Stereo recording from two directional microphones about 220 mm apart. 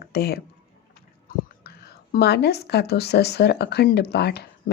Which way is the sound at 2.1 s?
50° left (ahead or behind).